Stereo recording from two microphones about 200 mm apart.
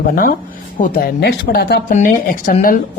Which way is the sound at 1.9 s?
40° left (ahead or behind).